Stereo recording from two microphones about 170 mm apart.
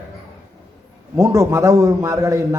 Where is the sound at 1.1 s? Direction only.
15° right (ahead or behind).